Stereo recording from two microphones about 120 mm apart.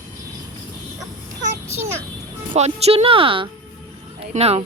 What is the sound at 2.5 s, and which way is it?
Speech, 65° right (ahead or behind).